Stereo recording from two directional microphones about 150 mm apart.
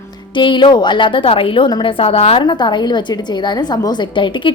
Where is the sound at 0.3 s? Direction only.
30° left (ahead or behind).